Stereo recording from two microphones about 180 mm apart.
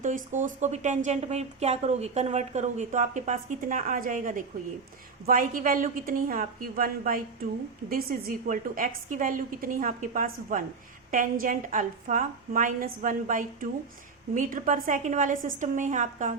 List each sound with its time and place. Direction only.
0.0 s a woman's voice: 45° right (ahead or behind)